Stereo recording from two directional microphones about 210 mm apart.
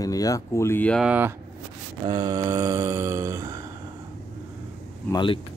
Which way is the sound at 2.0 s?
20° right (ahead or behind).